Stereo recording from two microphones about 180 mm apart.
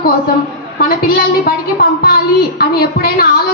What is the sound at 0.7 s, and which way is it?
A woman's voice, 55° left (ahead or behind).